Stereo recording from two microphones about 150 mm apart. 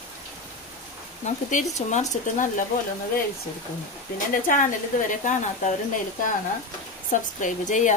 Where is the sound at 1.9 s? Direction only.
55° left (ahead or behind).